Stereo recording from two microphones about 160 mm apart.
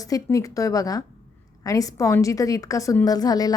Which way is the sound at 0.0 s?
20° left (ahead or behind).